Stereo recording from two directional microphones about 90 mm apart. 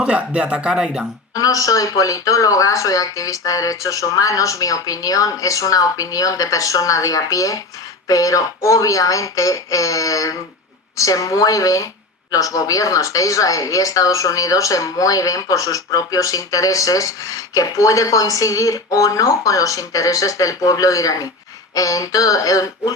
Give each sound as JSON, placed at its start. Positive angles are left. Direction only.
{"t": 0.0, "sound": "speech", "side_deg": -10}
{"t": 1.4, "sound": "speech", "side_deg": 40}